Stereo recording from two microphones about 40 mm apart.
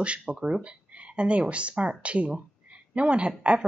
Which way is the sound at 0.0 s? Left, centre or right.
Right.